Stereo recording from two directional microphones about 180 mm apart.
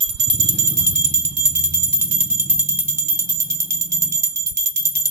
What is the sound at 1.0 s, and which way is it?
Music, 15° right (ahead or behind).